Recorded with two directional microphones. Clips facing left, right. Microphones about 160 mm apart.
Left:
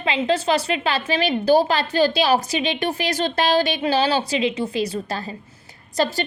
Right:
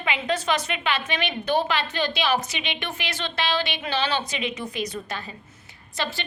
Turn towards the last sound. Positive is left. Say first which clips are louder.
# left 8 dB
turn(degrees=40)  # may be behind; listen again after turning